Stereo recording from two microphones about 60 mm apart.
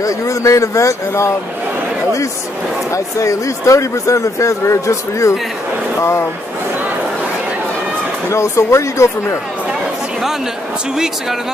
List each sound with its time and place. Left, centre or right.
0.0 s speech: left
2.9 s speech: left
8.3 s speech: left